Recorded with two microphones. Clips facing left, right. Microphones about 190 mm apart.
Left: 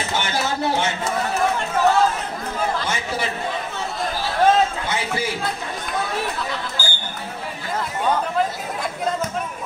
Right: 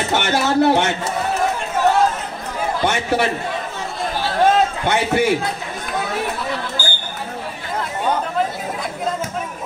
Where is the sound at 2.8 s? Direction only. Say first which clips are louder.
Right 7 dB; 65° right (ahead or behind).